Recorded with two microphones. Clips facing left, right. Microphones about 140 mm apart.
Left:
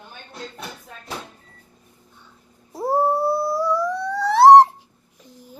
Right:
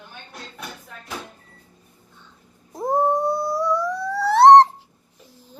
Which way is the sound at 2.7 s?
5° left (ahead or behind).